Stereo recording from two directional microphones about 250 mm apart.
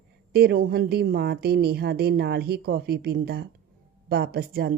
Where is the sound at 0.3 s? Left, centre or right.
Right.